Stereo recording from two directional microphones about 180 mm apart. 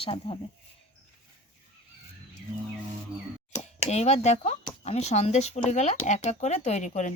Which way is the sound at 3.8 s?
40° left (ahead or behind).